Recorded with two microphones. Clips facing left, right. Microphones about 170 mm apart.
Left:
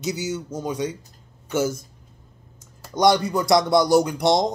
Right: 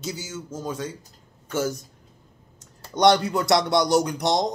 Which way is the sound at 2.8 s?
Centre (ahead or behind).